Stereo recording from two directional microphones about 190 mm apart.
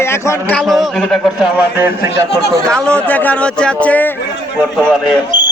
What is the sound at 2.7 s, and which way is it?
Speech, 5° left (ahead or behind).